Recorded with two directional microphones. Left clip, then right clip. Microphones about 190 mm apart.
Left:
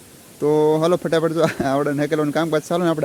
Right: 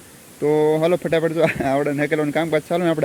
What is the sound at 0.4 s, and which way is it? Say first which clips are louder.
Speech: left 1 dB; 15° left (ahead or behind).